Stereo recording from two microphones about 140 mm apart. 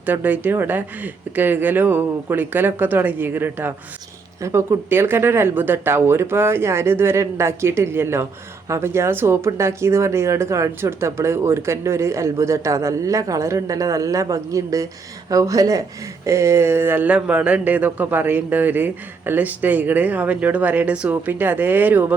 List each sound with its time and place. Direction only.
0.0 s speech: 10° right (ahead or behind)